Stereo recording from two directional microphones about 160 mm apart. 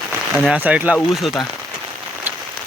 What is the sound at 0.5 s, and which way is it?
Speech, 10° right (ahead or behind).